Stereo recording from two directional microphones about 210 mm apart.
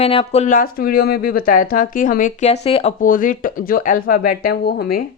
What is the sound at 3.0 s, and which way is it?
Speech, 40° left (ahead or behind).